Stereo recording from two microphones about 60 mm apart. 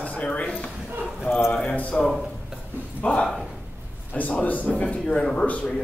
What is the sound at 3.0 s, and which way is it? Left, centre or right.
Speech, centre.